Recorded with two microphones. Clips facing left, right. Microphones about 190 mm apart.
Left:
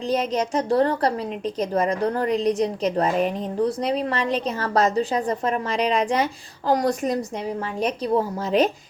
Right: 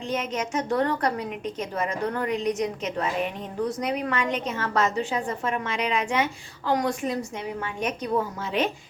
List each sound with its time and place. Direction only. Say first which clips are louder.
0.1 s a woman's voice: left 5 dB; 35° left (ahead or behind)